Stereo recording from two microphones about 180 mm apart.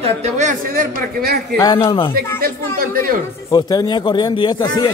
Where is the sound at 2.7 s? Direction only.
50° right (ahead or behind).